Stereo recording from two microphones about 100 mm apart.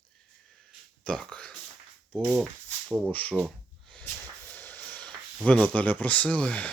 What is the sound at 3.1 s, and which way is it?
Speech, 15° left (ahead or behind).